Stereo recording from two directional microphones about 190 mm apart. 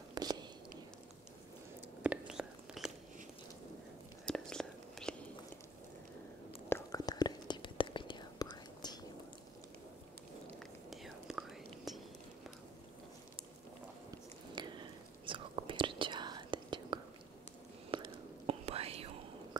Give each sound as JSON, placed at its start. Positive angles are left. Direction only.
{"t": 0.1, "sound": "whispering", "side_deg": -20}
{"t": 2.0, "sound": "whispering", "side_deg": -5}
{"t": 4.3, "sound": "whispering", "side_deg": 5}
{"t": 6.7, "sound": "whispering", "side_deg": 20}
{"t": 10.9, "sound": "whispering", "side_deg": 0}
{"t": 14.6, "sound": "a sound", "side_deg": -25}
{"t": 15.2, "sound": "whispering", "side_deg": -25}